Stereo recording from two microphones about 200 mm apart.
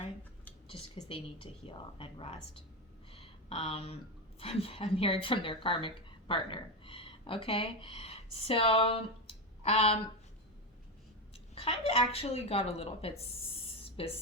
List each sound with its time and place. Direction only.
0.7 s a woman's voice: 25° left (ahead or behind)
3.1 s a sound: 30° left (ahead or behind)
4.4 s speech: 30° left (ahead or behind)
11.5 s a woman's voice: 30° left (ahead or behind)